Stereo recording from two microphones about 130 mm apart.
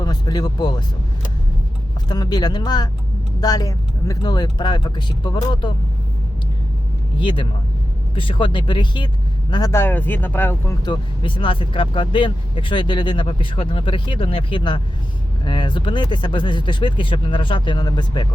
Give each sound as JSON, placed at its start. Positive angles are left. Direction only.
{"t": 0.0, "sound": "speech", "side_deg": 30}
{"t": 2.0, "sound": "speech", "side_deg": 30}
{"t": 7.2, "sound": "speech", "side_deg": 40}
{"t": 9.7, "sound": "speech", "side_deg": 15}
{"t": 10.8, "sound": "speech", "side_deg": 35}